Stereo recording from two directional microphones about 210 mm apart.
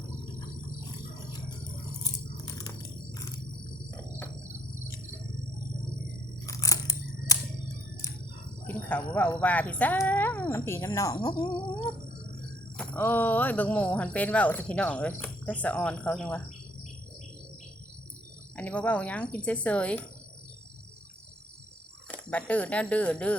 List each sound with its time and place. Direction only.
0.9 s a sound: 20° left (ahead or behind)
2.0 s biting: 15° left (ahead or behind)
3.2 s a sound: 15° left (ahead or behind)
6.4 s scissors: 15° left (ahead or behind)
8.6 s speech: 10° left (ahead or behind)
12.7 s speech: 5° left (ahead or behind)
18.5 s speech: 5° left (ahead or behind)
22.1 s speech: 5° left (ahead or behind)